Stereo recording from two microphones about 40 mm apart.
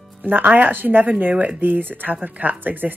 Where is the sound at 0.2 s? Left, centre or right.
Right.